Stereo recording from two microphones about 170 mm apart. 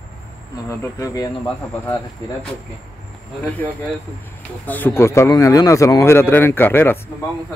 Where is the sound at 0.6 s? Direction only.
20° left (ahead or behind).